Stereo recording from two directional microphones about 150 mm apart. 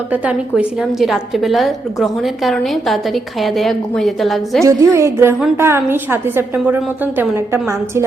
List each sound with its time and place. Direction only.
0.1 s a woman's voice: 10° right (ahead or behind)
4.6 s a woman's voice: 20° right (ahead or behind)